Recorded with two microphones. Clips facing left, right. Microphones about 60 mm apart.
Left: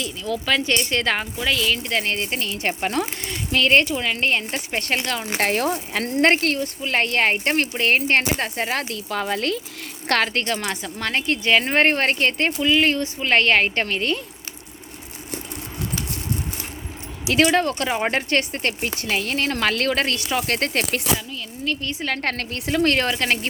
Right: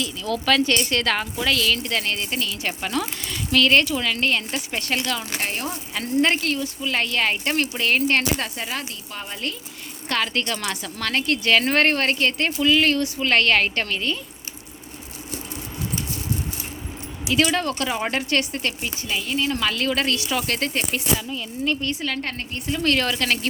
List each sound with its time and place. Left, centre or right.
0.0 s speech: left
1.4 s speech: centre; by 5.3 s left
5.4 s speech: left
5.6 s speech: left
8.9 s speech: left
10.2 s speech: left
17.3 s speech: left
20.7 s a woman's voice: left
22.0 s a woman's voice: left
22.8 s speech: left